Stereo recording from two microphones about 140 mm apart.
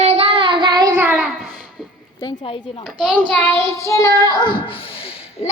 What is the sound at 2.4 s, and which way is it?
Speech, 40° left (ahead or behind).